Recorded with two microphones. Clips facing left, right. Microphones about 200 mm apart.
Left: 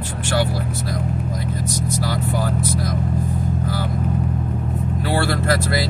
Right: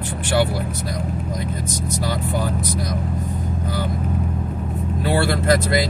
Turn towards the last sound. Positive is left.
turn(degrees=-20)  # may be behind; listen again after turning